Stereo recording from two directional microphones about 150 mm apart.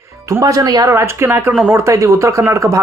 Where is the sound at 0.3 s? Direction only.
20° right (ahead or behind).